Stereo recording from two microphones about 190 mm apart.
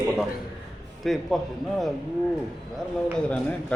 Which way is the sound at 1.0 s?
Centre (ahead or behind).